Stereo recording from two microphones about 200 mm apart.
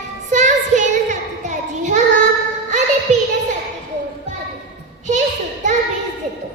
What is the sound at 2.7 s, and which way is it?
Music, 35° right (ahead or behind).